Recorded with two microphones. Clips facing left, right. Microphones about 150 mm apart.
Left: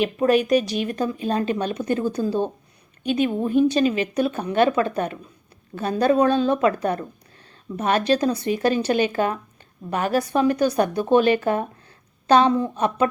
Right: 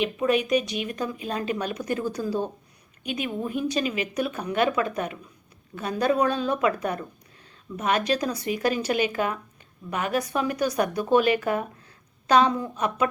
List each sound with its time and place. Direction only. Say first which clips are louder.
0.0 s speech: left 5 dB; 40° left (ahead or behind)